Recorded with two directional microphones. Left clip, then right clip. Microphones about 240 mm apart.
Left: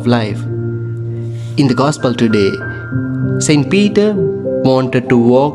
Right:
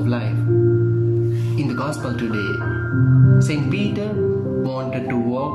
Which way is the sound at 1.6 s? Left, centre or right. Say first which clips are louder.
Left 14 dB; left.